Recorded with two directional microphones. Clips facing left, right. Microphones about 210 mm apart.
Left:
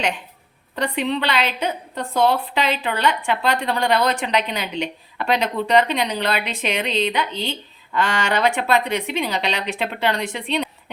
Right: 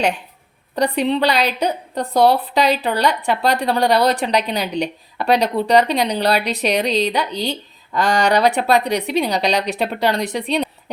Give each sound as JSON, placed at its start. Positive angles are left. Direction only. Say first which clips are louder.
{"t": 0.8, "sound": "a woman's voice", "louder": "right 5 dB", "side_deg": -35}